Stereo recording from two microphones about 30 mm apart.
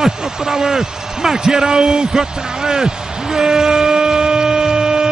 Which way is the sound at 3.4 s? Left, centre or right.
Centre.